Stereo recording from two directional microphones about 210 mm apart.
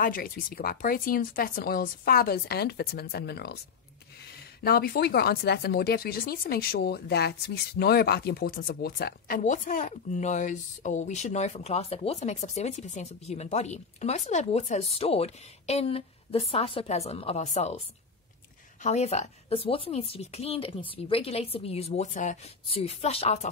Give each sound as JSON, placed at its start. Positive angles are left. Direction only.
{"t": 0.0, "sound": "speech", "side_deg": 40}
{"t": 4.6, "sound": "speech", "side_deg": 45}
{"t": 18.8, "sound": "speech", "side_deg": 35}